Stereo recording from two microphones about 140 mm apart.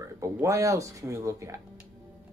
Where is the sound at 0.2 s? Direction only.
20° right (ahead or behind).